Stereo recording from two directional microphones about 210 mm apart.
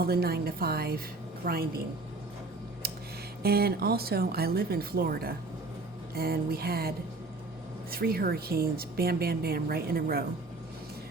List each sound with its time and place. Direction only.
0.0 s a woman's voice: 45° right (ahead or behind)
3.4 s a woman's voice: 50° right (ahead or behind)